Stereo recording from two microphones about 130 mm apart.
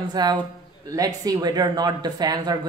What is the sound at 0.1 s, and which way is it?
Speech, 30° right (ahead or behind).